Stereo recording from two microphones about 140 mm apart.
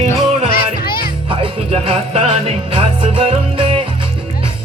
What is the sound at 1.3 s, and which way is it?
Music, 40° right (ahead or behind).